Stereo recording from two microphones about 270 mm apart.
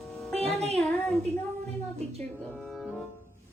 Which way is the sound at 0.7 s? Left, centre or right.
Centre.